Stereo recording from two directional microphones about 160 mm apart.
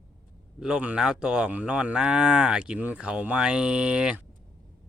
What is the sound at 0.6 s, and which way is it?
Moo, 5° right (ahead or behind).